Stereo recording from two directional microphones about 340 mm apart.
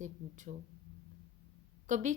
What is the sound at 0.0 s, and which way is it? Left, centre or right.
Speech, right.